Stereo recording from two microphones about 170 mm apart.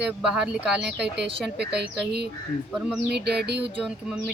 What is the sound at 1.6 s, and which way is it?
Speech, 75° right (ahead or behind).